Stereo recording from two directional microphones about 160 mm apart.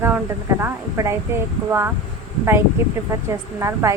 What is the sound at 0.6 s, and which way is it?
Speech, 20° right (ahead or behind).